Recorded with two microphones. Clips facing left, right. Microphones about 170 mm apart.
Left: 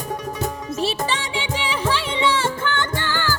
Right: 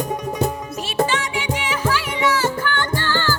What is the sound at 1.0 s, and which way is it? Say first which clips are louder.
Music: right 3 dB; 30° left (ahead or behind).